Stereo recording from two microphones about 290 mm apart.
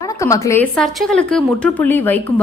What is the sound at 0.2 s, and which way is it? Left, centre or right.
A woman's voice, centre.